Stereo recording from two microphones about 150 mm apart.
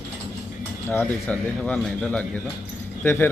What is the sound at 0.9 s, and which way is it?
A man's voice, 10° left (ahead or behind).